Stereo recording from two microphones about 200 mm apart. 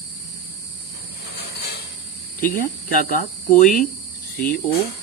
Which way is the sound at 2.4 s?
45° left (ahead or behind).